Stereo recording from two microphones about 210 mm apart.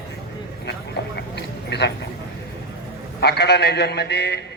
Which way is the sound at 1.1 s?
50° left (ahead or behind).